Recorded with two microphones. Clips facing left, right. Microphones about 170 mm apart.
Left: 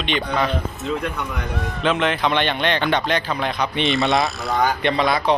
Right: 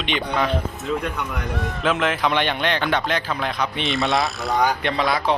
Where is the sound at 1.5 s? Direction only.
Centre (ahead or behind).